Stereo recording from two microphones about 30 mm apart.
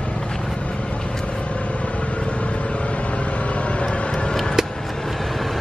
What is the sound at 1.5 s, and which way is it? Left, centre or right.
Vehicle, left.